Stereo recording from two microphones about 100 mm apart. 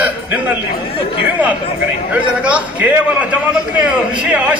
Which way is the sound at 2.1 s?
15° right (ahead or behind).